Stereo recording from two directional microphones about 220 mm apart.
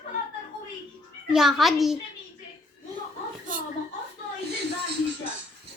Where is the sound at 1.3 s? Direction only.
Centre (ahead or behind).